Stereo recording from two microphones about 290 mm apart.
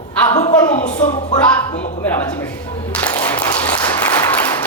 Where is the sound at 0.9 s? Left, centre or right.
Left.